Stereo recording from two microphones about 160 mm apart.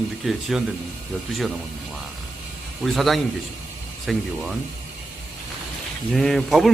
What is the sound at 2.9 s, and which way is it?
A man's voice, centre (ahead or behind).